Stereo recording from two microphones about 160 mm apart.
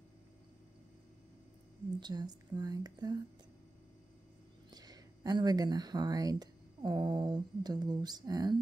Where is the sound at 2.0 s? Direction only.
25° right (ahead or behind).